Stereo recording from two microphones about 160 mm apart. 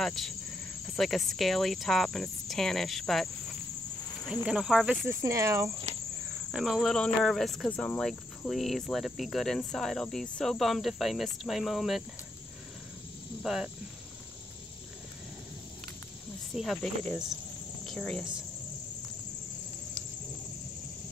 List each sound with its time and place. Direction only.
0.0 s cricket: centre (ahead or behind)
0.8 s speech: centre (ahead or behind)
4.3 s speech: 5° right (ahead or behind)
5.0 s cricket: 15° right (ahead or behind)
6.5 s speech: centre (ahead or behind)
13.4 s speech: 5° right (ahead or behind)
16.5 s speech: centre (ahead or behind)